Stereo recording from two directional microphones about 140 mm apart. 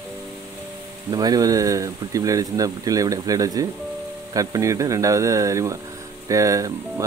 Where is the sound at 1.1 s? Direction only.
25° right (ahead or behind).